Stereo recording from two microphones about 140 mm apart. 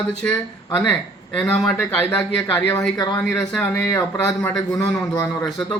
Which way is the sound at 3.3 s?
15° left (ahead or behind).